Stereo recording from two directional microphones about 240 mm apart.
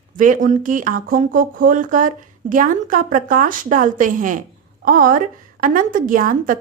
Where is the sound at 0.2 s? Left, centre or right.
Right.